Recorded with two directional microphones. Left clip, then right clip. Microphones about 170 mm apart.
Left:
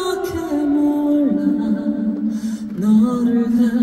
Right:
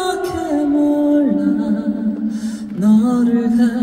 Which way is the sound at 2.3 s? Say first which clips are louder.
Even; 30° right (ahead or behind).